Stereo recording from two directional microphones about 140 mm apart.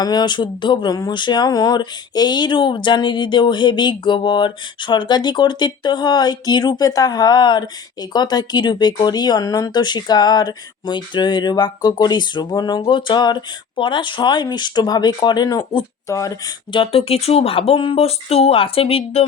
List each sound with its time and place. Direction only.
0.0 s speech: 30° left (ahead or behind)
16.7 s speech: 40° left (ahead or behind)